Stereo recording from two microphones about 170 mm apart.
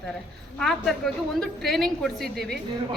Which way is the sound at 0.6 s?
Centre (ahead or behind).